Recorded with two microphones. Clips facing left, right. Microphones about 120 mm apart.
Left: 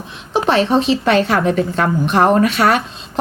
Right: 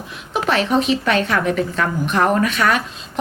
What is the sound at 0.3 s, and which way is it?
A woman's voice, 30° left (ahead or behind).